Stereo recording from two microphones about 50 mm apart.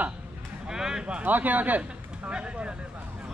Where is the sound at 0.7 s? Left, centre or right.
Centre.